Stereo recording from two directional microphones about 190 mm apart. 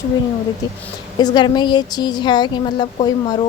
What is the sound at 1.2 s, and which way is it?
Speech, 20° left (ahead or behind).